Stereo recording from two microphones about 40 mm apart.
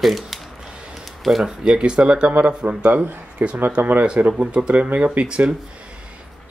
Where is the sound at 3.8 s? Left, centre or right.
Right.